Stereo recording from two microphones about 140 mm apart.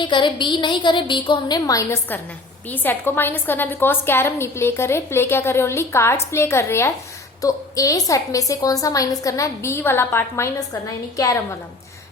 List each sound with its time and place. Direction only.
0.0 s a woman's voice: 35° left (ahead or behind)